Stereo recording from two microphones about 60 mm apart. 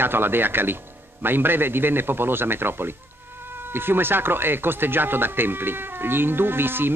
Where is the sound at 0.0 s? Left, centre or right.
Right.